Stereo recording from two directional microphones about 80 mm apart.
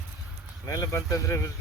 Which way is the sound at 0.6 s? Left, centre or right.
Left.